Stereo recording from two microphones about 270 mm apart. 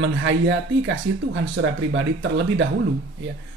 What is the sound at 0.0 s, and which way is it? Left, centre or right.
Speech, right.